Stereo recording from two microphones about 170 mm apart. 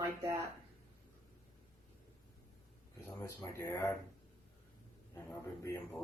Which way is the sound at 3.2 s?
15° left (ahead or behind).